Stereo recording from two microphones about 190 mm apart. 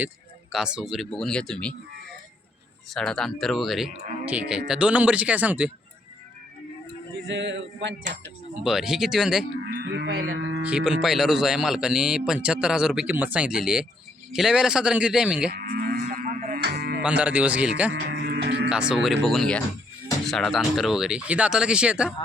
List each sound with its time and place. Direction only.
0.5 s speech: 5° right (ahead or behind)
2.9 s speech: centre (ahead or behind)
7.3 s a sound: 70° right (ahead or behind)
8.6 s speech: centre (ahead or behind)
9.6 s livestock: 60° right (ahead or behind)
10.6 s speech: 5° right (ahead or behind)
15.4 s livestock: 50° right (ahead or behind)
16.6 s music: 55° right (ahead or behind)
17.0 s speech: 5° right (ahead or behind)
18.2 s speech: 55° right (ahead or behind)
18.7 s speech: 5° right (ahead or behind)